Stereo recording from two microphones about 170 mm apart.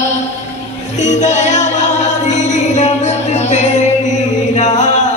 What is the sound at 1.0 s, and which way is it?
Music, 45° left (ahead or behind).